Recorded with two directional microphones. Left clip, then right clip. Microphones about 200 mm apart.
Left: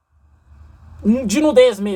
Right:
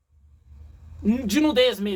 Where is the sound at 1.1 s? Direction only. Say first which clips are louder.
Left 6 dB; 20° right (ahead or behind).